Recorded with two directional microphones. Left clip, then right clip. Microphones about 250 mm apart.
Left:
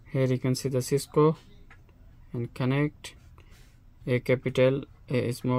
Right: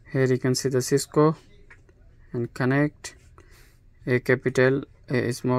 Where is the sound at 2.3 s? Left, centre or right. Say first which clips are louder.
Right 6 dB; centre.